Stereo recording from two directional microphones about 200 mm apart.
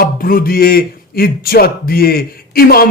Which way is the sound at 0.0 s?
45° left (ahead or behind).